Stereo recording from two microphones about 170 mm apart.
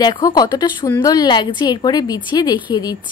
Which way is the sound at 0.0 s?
25° left (ahead or behind).